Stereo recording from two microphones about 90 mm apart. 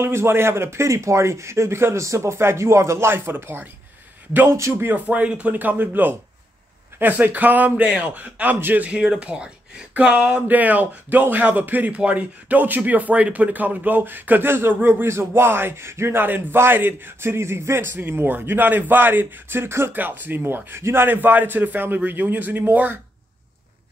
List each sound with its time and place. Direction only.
0.0 s speech: 30° right (ahead or behind)
8.9 s speech: 5° right (ahead or behind)